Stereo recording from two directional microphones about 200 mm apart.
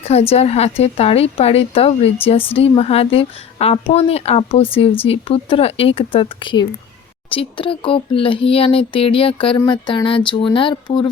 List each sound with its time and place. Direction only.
0.1 s a woman's voice: 30° left (ahead or behind)